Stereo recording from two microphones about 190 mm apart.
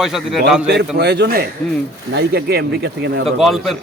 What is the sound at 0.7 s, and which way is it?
Speech, 60° right (ahead or behind).